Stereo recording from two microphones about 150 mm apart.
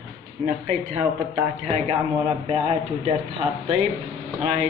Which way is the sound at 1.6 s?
40° right (ahead or behind).